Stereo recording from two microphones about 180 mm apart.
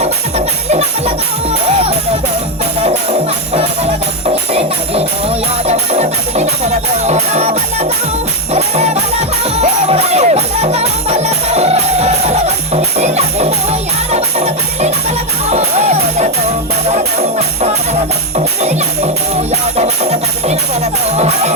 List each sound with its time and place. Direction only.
0.0 s music: 35° right (ahead or behind)
2.8 s music: 35° right (ahead or behind)
5.6 s music: 35° right (ahead or behind)
19.5 s music: 35° right (ahead or behind)